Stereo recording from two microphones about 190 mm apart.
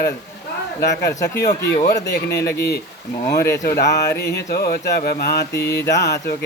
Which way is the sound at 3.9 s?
15° left (ahead or behind).